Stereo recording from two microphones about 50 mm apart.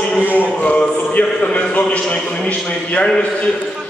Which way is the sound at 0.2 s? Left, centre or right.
Right.